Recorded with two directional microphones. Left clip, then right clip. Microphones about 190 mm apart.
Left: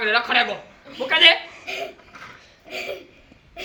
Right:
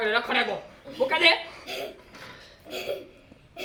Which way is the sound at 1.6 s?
35° right (ahead or behind).